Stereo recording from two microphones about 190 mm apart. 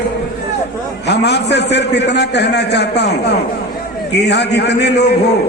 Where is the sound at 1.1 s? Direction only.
60° left (ahead or behind).